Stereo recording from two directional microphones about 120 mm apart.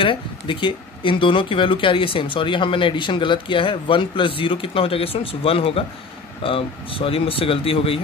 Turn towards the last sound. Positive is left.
turn(degrees=50)  # may be behind; listen again after turning